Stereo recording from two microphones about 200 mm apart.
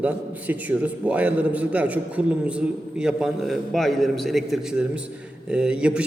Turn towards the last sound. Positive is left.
turn(degrees=-5)  # may be behind; listen again after turning